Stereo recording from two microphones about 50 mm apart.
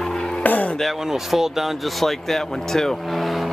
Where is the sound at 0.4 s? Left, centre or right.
Left.